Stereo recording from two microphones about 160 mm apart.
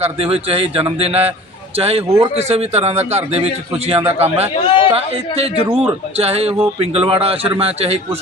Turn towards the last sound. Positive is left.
turn(degrees=-40)  # may be behind; listen again after turning